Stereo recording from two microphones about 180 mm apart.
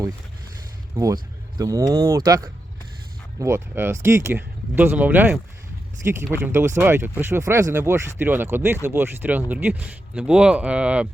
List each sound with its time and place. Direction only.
0.9 s speech: 20° right (ahead or behind)